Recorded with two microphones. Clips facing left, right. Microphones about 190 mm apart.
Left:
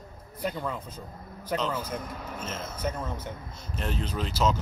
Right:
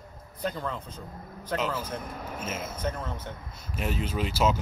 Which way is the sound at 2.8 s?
10° left (ahead or behind).